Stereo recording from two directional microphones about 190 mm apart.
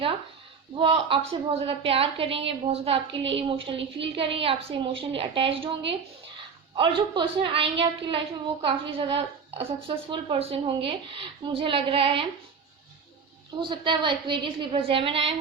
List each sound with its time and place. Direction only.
0.8 s a woman's voice: 30° right (ahead or behind)
3.8 s a woman's voice: 70° right (ahead or behind)
4.1 s a woman's voice: 30° right (ahead or behind)
6.7 s a woman's voice: 25° right (ahead or behind)
13.6 s a woman's voice: 25° right (ahead or behind)